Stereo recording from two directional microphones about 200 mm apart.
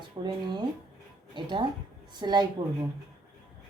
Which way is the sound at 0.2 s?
25° right (ahead or behind).